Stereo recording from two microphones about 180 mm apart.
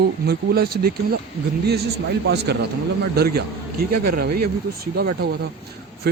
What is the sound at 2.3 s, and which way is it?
A man's voice, 65° right (ahead or behind).